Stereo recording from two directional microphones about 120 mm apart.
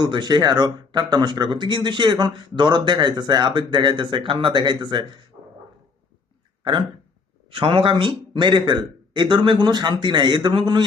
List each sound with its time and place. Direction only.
0.0 s speech: 35° right (ahead or behind)
7.5 s speech: 50° right (ahead or behind)